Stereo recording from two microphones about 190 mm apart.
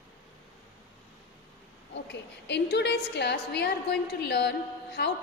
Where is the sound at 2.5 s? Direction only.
65° left (ahead or behind).